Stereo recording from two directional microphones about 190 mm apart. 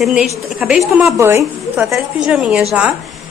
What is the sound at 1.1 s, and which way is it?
Speech, 15° right (ahead or behind).